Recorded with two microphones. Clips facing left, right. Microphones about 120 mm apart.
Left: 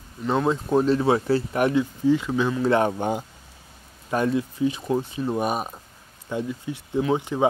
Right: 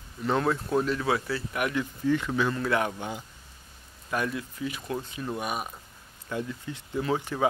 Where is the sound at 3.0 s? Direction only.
50° left (ahead or behind).